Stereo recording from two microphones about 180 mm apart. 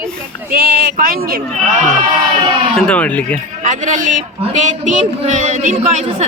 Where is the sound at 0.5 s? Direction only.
55° right (ahead or behind).